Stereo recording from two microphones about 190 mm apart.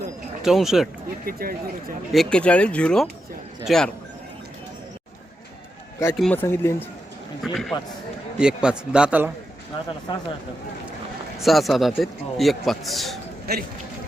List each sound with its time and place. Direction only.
0.4 s a man's voice: centre (ahead or behind)
1.2 s speech: 50° right (ahead or behind)
2.1 s a man's voice: 5° left (ahead or behind)
6.1 s speech: 5° left (ahead or behind)
7.4 s a man's voice: centre (ahead or behind)
10.1 s speech: 25° left (ahead or behind)
11.4 s a man's voice: centre (ahead or behind)
13.5 s a man's voice: 55° right (ahead or behind)